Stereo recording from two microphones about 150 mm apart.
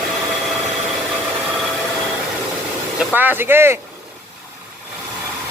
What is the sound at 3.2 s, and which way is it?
Speech, 15° right (ahead or behind).